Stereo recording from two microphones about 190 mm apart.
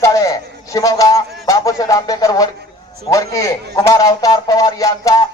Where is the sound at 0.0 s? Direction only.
15° left (ahead or behind).